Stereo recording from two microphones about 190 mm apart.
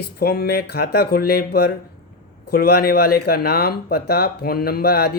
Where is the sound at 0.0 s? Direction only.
55° left (ahead or behind).